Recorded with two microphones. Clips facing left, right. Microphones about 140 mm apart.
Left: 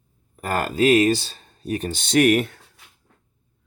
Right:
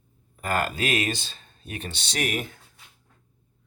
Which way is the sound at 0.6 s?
35° left (ahead or behind).